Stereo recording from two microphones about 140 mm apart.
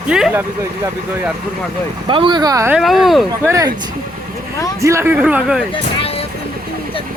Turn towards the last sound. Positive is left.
turn(degrees=-5)  # may be behind; listen again after turning